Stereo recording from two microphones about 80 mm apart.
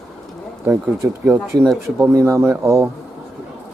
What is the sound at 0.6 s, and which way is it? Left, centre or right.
Speech, right.